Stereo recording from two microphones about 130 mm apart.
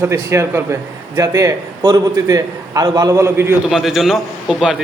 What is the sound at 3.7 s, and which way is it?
A man's voice, centre (ahead or behind).